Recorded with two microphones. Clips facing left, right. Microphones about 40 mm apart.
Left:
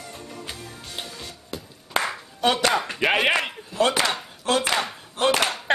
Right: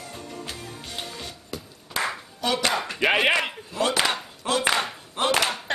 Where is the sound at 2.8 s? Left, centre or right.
Centre.